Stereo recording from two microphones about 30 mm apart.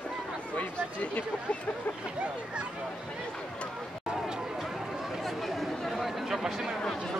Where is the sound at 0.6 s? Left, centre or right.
Left.